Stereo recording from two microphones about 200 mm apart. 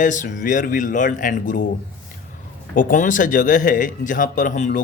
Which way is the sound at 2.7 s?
40° left (ahead or behind).